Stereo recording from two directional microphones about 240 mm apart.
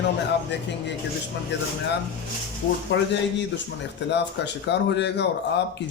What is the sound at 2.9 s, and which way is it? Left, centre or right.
Speech, left.